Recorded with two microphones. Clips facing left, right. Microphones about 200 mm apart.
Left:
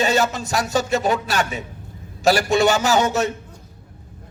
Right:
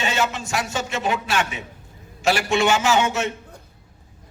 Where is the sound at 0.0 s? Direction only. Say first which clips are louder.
Left 5 dB; 40° left (ahead or behind).